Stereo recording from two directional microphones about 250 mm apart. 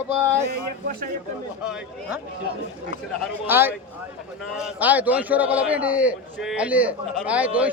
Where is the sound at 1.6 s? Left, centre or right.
Centre.